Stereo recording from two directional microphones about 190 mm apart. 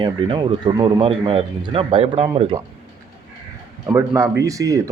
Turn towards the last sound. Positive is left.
turn(degrees=-15)  # may be behind; listen again after turning